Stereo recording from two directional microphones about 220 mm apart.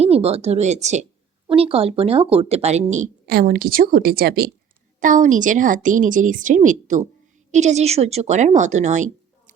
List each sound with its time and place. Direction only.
0.0 s a woman's voice: 25° right (ahead or behind)